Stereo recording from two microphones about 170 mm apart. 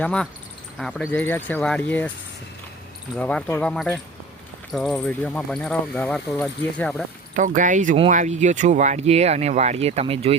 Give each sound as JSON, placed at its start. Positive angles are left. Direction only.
{"t": 0.0, "sound": "speech", "side_deg": 5}
{"t": 3.2, "sound": "speech", "side_deg": 10}
{"t": 7.3, "sound": "speech", "side_deg": -50}